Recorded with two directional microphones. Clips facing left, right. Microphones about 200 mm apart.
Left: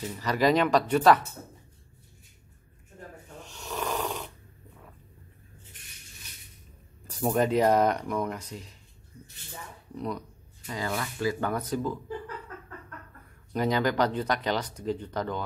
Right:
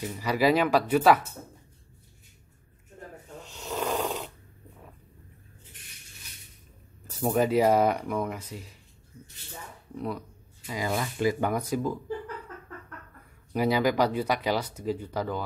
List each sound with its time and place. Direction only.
0.0 s speech: 10° right (ahead or behind)
3.5 s snoring: 15° right (ahead or behind)
7.2 s speech: 5° right (ahead or behind)
9.9 s speech: 5° right (ahead or behind)
13.5 s speech: 10° right (ahead or behind)